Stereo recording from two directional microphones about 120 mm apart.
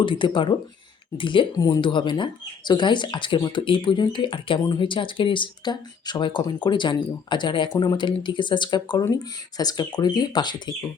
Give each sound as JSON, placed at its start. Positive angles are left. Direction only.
{"t": 0.0, "sound": "speech", "side_deg": 45}
{"t": 1.5, "sound": "speech", "side_deg": 30}